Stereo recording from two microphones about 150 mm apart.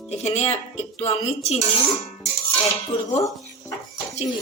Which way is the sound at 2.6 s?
45° left (ahead or behind).